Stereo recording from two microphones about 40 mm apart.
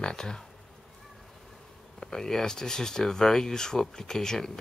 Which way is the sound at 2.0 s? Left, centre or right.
Centre.